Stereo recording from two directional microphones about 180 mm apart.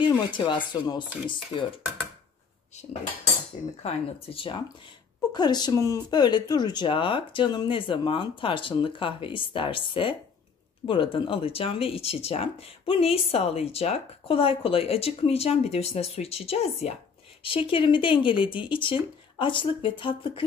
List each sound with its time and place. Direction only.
0.0 s speech: 25° left (ahead or behind)
3.8 s speech: 30° left (ahead or behind)